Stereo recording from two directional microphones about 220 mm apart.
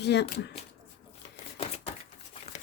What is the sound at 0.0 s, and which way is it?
Speech, 50° left (ahead or behind).